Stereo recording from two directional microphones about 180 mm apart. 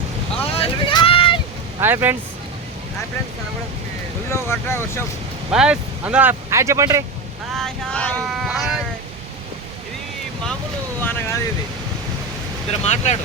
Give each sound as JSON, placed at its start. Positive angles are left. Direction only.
{"t": 0.5, "sound": "vehicle", "side_deg": 30}
{"t": 1.8, "sound": "speech", "side_deg": -10}
{"t": 4.3, "sound": "speech", "side_deg": 15}
{"t": 5.5, "sound": "speech", "side_deg": -5}
{"t": 7.5, "sound": "speech", "side_deg": 5}
{"t": 11.0, "sound": "vehicle", "side_deg": 15}
{"t": 12.8, "sound": "speech", "side_deg": 40}